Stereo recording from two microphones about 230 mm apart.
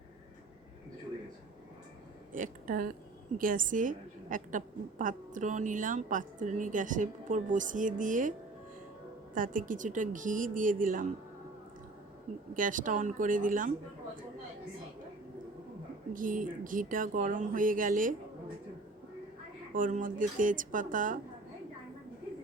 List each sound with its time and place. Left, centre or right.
2.3 s a woman's voice: right
9.3 s a woman's voice: right
12.5 s a woman's voice: right
16.1 s a woman's voice: right
19.7 s a woman's voice: right